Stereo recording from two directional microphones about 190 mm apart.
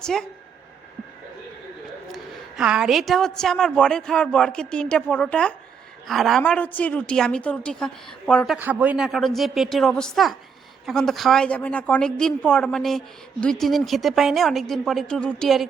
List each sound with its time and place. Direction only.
0.0 s a woman's voice: 5° left (ahead or behind)
2.1 s a woman's voice: 5° right (ahead or behind)
8.5 s a woman's voice: 10° right (ahead or behind)